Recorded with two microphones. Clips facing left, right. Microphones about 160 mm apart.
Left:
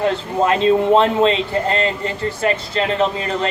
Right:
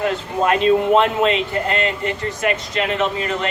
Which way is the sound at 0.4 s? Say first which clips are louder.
Left 1 dB; 30° left (ahead or behind).